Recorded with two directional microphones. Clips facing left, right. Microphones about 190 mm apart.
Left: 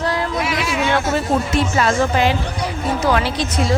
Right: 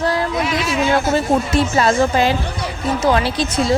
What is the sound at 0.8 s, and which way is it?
A woman's voice, 35° right (ahead or behind).